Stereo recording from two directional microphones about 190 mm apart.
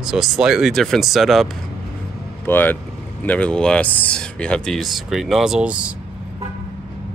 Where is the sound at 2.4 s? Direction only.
10° left (ahead or behind); by 5.9 s 5° right (ahead or behind).